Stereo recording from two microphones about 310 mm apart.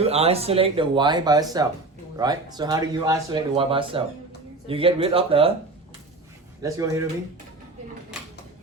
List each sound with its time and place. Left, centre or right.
0.0 s speech: centre
6.6 s speech: centre